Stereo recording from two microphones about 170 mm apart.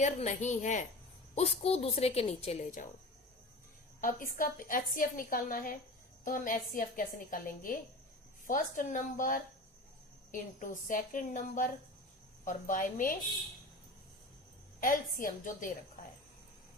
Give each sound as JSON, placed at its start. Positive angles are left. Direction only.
{"t": 0.0, "sound": "a woman's voice", "side_deg": 45}
{"t": 4.0, "sound": "a woman's voice", "side_deg": 55}
{"t": 14.8, "sound": "a woman's voice", "side_deg": 55}